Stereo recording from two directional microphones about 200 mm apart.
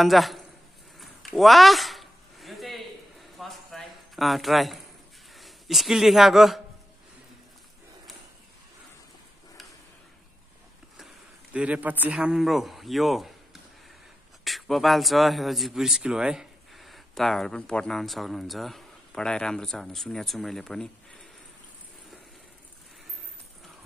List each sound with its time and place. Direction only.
0.0 s a man's voice: centre (ahead or behind)
0.9 s a sound: centre (ahead or behind)
5.3 s speech: centre (ahead or behind)
11.5 s a man's voice: 5° right (ahead or behind)
14.4 s speech: centre (ahead or behind)